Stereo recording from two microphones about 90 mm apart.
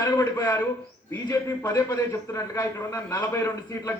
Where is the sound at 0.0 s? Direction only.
40° left (ahead or behind).